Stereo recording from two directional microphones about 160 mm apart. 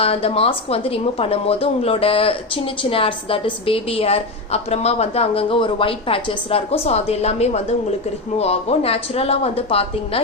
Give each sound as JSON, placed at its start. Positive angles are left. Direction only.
{"t": 0.0, "sound": "a woman's voice", "side_deg": 35}